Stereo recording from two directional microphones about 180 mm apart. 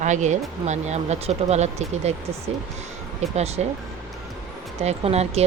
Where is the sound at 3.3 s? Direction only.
35° right (ahead or behind).